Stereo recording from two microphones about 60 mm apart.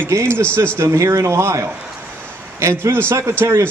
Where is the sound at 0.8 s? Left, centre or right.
Right.